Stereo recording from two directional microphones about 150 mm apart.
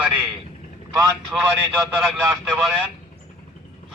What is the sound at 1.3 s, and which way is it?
Speech, 5° right (ahead or behind).